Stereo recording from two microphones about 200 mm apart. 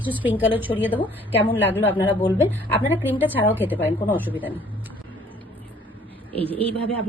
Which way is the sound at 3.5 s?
10° right (ahead or behind).